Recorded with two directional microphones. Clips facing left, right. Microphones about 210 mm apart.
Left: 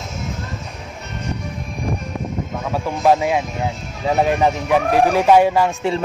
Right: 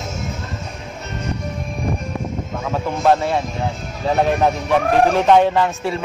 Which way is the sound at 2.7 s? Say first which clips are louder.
Even; 5° left (ahead or behind).